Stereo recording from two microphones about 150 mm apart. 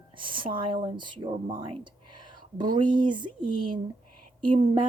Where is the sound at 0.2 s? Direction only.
35° right (ahead or behind).